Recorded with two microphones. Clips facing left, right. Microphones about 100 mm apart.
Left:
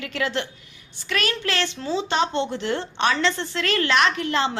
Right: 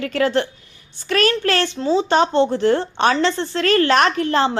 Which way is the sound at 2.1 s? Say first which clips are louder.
Right 7 dB; 40° right (ahead or behind).